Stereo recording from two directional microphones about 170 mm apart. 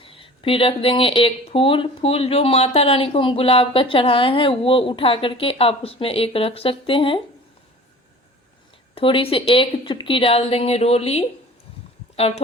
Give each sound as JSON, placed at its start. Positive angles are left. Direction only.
{"t": 0.0, "sound": "speech", "side_deg": 30}
{"t": 9.0, "sound": "speech", "side_deg": 30}